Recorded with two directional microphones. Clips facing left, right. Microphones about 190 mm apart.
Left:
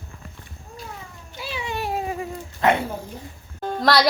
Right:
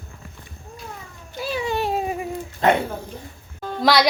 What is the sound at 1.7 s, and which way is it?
Cat, 25° right (ahead or behind).